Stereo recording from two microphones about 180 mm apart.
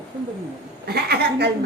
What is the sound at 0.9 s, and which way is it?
Speech, 60° right (ahead or behind).